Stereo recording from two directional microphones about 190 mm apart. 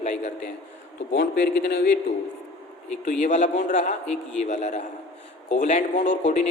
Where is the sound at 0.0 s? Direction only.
40° left (ahead or behind).